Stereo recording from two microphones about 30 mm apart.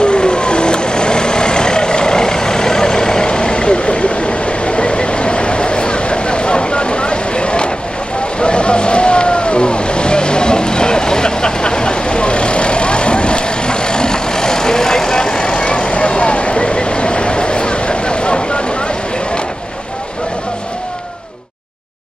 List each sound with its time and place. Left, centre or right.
0.0 s vehicle: left
15.6 s vehicle: left